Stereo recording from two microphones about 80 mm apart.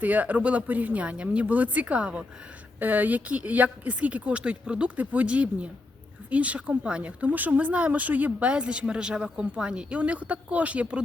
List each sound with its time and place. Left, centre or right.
0.0 s speech: right